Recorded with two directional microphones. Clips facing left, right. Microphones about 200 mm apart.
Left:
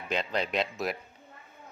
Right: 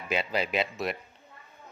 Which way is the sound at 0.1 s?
5° right (ahead or behind).